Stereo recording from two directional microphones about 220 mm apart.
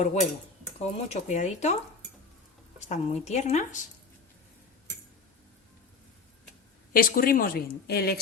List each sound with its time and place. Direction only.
0.0 s a woman's voice: 30° left (ahead or behind)
6.9 s a woman's voice: 40° left (ahead or behind)